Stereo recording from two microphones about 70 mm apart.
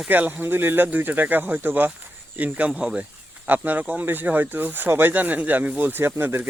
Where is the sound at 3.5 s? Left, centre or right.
Right.